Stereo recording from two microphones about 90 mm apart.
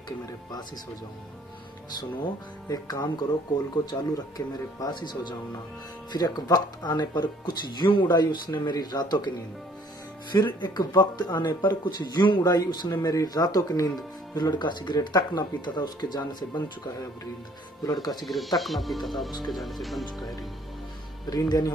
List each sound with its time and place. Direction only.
2.0 s speech: 50° left (ahead or behind)
10.3 s speech: 50° left (ahead or behind)
14.3 s speech: 55° left (ahead or behind)
18.2 s speech: centre (ahead or behind)
21.3 s speech: 45° left (ahead or behind)